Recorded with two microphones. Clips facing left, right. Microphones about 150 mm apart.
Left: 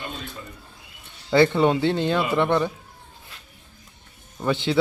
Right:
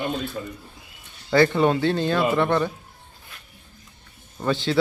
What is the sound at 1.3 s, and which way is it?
Speech, 20° left (ahead or behind).